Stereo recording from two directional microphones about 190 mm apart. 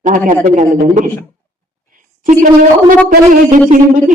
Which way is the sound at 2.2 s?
45° right (ahead or behind).